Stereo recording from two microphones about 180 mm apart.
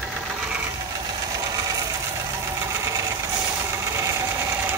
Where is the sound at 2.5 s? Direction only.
15° right (ahead or behind).